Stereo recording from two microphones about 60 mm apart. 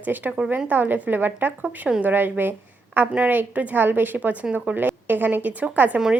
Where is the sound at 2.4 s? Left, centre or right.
Right.